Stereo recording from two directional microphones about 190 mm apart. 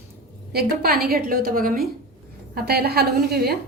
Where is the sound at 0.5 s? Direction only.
55° right (ahead or behind).